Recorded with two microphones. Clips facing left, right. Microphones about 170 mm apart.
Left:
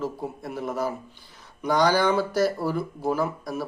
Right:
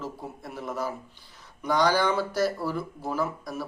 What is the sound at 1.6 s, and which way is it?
Speech, centre (ahead or behind).